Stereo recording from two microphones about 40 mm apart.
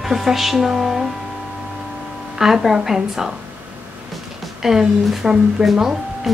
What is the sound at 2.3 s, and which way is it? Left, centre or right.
Speech, centre.